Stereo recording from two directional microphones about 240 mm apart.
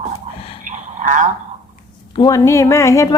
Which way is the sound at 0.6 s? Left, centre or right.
Right.